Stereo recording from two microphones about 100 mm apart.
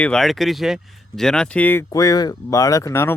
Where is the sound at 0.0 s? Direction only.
5° left (ahead or behind).